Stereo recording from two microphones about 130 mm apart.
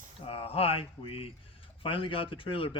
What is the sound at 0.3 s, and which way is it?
Speech, 50° left (ahead or behind).